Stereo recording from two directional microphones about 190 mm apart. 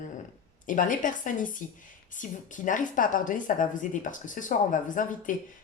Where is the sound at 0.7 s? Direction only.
45° left (ahead or behind).